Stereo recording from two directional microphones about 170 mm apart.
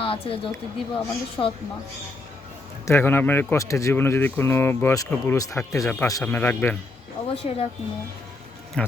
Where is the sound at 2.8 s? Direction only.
15° left (ahead or behind).